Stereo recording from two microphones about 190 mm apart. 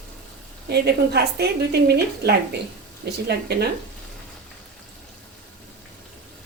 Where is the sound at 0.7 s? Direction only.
60° right (ahead or behind).